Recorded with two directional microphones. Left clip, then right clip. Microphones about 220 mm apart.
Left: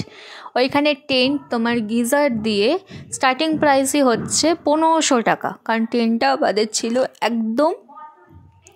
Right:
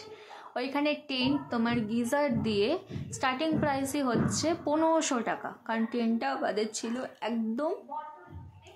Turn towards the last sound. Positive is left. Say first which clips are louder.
# left 13 dB
turn(degrees=45)  # may be behind; listen again after turning